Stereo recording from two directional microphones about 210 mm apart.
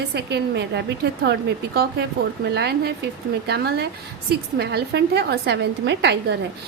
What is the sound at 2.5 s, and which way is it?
A woman's voice, 50° right (ahead or behind).